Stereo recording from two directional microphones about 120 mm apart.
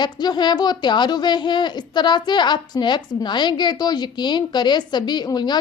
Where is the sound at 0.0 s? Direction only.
35° left (ahead or behind).